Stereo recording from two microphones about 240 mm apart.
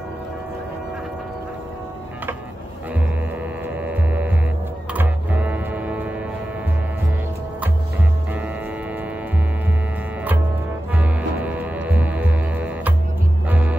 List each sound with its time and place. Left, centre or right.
3.6 s hum: centre
4.9 s music: centre
11.0 s music: centre